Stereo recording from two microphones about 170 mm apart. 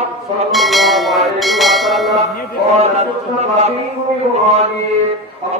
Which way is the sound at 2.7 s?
40° right (ahead or behind).